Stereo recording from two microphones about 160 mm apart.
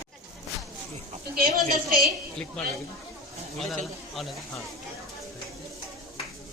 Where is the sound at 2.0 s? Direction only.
5° left (ahead or behind).